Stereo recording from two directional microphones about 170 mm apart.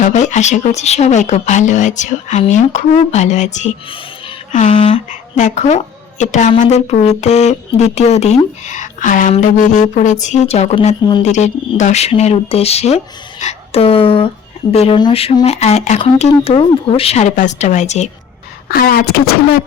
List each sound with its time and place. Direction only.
0.0 s a woman's voice: 45° left (ahead or behind)
18.7 s speech: 60° left (ahead or behind)